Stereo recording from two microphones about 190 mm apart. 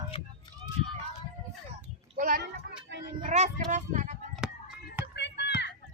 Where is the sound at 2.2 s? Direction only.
45° right (ahead or behind).